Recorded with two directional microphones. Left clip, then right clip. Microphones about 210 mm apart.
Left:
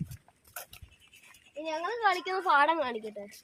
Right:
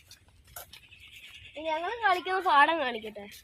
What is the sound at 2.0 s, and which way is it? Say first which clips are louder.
A woman's voice: right 1 dB; 25° right (ahead or behind).